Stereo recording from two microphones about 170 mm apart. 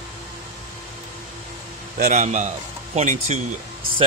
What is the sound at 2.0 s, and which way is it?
A man's voice, 45° right (ahead or behind).